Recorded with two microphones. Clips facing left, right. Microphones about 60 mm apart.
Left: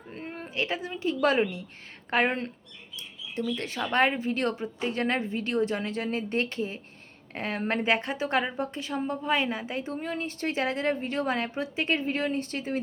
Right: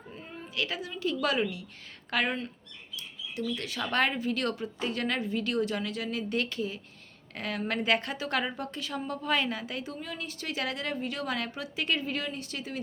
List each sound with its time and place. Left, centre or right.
0.1 s a sound: left
0.5 s a woman's voice: left
3.8 s a woman's voice: left